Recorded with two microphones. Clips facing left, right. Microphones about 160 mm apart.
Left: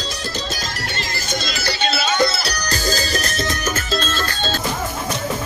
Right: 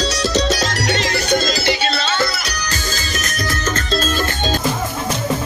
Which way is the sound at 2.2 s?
30° left (ahead or behind).